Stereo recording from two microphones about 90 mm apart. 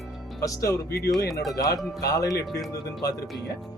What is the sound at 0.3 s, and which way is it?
Speech, 35° left (ahead or behind).